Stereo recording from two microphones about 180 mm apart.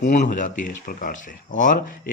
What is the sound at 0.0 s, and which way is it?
Speech, 45° left (ahead or behind).